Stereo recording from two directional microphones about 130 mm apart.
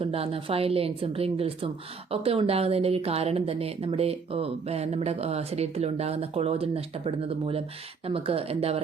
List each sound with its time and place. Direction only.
0.0 s a woman's voice: 45° right (ahead or behind)